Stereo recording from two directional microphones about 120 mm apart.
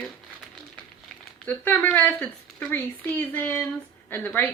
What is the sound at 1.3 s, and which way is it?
Speech, 10° left (ahead or behind).